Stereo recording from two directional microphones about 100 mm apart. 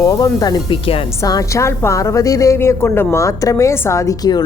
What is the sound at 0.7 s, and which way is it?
Speech, 70° left (ahead or behind).